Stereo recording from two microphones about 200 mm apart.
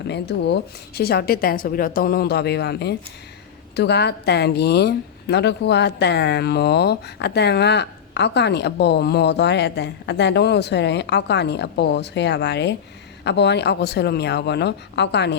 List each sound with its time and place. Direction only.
0.1 s a woman's voice: 60° left (ahead or behind)